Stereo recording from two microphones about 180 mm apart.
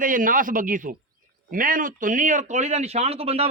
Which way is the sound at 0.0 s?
50° right (ahead or behind).